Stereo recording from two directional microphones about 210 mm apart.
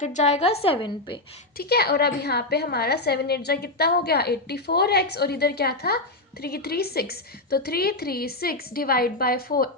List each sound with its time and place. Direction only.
0.0 s a woman's voice: 35° left (ahead or behind)
1.5 s a woman's voice: 50° left (ahead or behind)